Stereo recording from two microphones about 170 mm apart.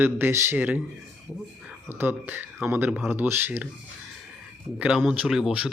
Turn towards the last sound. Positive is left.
turn(degrees=-5)  # may be behind; listen again after turning